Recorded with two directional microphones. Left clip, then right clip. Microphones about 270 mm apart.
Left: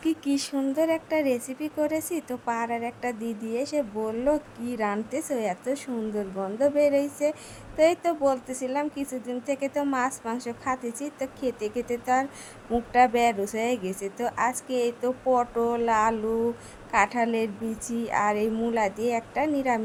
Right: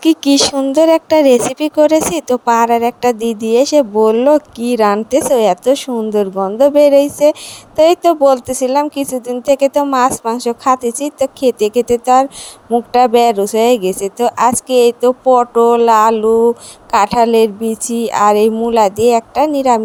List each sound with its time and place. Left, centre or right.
0.0 s speech: right